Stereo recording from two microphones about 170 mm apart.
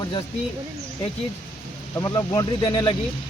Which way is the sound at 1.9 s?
20° left (ahead or behind).